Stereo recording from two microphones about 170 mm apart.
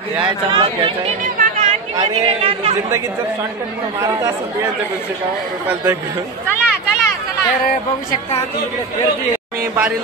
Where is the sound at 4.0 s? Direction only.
15° right (ahead or behind).